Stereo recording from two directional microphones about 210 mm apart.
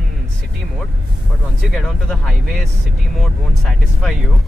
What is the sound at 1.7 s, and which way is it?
Speech, centre (ahead or behind).